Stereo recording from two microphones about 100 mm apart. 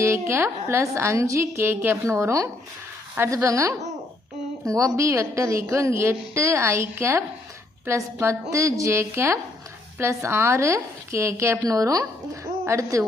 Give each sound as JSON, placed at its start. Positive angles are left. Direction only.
{"t": 0.0, "sound": "a woman's voice", "side_deg": -25}